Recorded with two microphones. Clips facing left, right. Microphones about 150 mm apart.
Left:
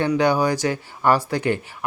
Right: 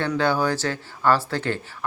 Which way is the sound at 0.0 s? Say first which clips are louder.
Left 3 dB; 15° left (ahead or behind).